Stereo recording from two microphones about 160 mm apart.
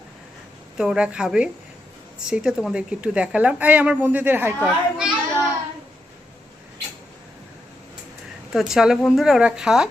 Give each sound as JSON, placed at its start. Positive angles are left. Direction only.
{"t": 0.8, "sound": "a woman's voice", "side_deg": -5}
{"t": 4.6, "sound": "speech", "side_deg": -5}
{"t": 8.5, "sound": "speech", "side_deg": -5}